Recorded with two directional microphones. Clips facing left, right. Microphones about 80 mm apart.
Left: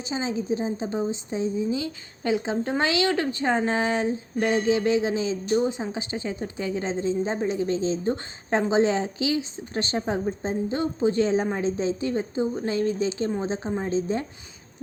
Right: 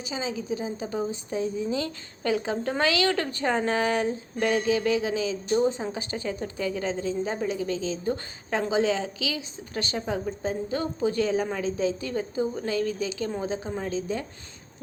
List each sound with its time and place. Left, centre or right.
0.0 s a woman's voice: left
5.5 s a woman's voice: centre